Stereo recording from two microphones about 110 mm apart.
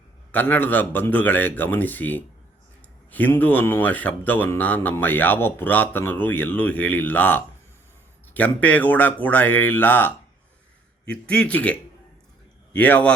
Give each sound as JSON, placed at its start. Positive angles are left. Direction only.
{"t": 0.3, "sound": "a man's voice", "side_deg": 15}